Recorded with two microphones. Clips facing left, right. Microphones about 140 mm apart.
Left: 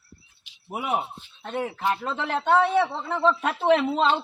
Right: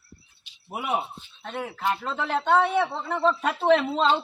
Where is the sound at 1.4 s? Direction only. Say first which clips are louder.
Left 3 dB; 5° left (ahead or behind).